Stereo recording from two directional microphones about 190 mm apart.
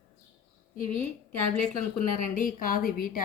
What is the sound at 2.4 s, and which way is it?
Speech, 50° left (ahead or behind).